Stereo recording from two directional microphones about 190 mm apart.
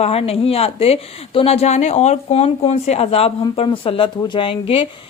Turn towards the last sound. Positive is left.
turn(degrees=30)  # may be behind; listen again after turning